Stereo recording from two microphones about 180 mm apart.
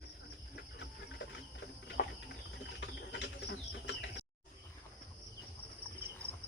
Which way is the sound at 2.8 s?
75° left (ahead or behind).